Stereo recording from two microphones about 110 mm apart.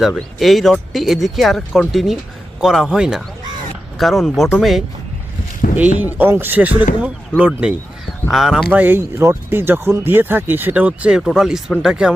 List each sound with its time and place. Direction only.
0.1 s speech: centre (ahead or behind)
5.7 s speech: 15° right (ahead or behind)
8.7 s speech: 15° right (ahead or behind)